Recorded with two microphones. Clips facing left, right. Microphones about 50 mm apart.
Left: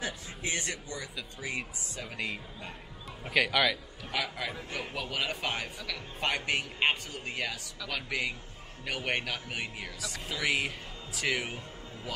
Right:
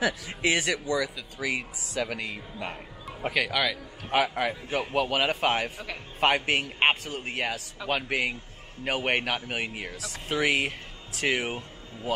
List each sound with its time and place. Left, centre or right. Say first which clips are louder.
0.0 s a man's voice: right 10 dB; right
3.3 s a man's voice: left 1 dB; centre
4.1 s speech: right 9 dB; right
5.8 s speech: right 2 dB; right
6.2 s a man's voice: right 7 dB; right